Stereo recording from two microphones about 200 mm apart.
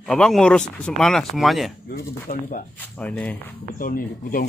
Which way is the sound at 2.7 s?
10° left (ahead or behind).